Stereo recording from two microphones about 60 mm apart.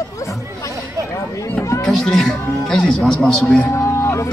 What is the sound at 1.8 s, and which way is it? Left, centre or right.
A man's voice, centre.